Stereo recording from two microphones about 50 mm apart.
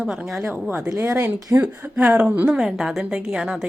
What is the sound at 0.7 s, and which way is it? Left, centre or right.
Speech, right.